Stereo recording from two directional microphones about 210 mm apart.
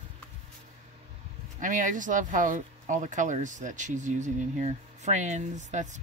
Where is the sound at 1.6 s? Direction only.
40° right (ahead or behind).